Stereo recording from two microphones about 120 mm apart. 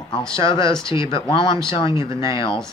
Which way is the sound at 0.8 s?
25° right (ahead or behind).